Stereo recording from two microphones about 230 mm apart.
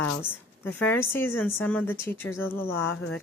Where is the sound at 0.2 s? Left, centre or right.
Centre.